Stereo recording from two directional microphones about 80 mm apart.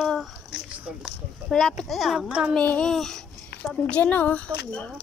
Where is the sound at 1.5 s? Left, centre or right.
Centre.